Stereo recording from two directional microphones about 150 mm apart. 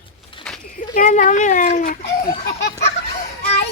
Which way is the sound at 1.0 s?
55° left (ahead or behind).